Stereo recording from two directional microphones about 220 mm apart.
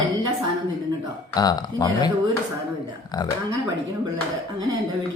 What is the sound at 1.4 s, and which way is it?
Speech, 15° left (ahead or behind).